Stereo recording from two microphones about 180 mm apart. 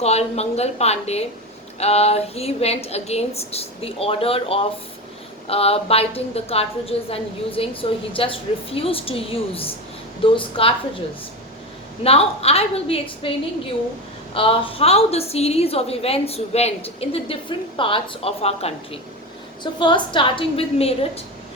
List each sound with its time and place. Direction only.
0.0 s a woman's voice: 35° left (ahead or behind)
12.0 s a woman's voice: 35° left (ahead or behind)
14.3 s a woman's voice: 30° left (ahead or behind)